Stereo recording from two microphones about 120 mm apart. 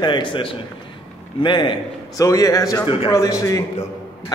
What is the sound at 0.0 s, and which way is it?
A man's voice, 40° left (ahead or behind).